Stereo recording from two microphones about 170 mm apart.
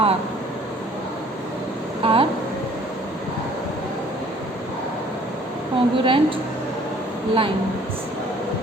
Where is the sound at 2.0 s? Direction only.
35° right (ahead or behind).